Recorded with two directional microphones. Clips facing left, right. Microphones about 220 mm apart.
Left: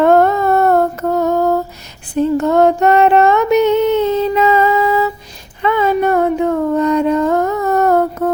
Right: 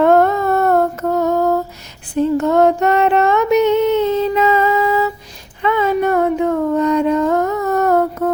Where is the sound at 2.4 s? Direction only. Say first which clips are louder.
Left 2 dB; 35° left (ahead or behind).